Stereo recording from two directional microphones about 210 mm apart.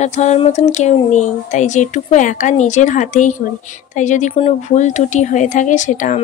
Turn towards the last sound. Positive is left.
turn(degrees=35)  # may be behind; listen again after turning